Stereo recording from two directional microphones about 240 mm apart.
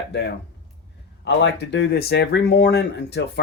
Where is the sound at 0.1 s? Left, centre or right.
Left.